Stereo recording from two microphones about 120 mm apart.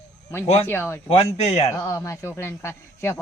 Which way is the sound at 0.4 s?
65° left (ahead or behind).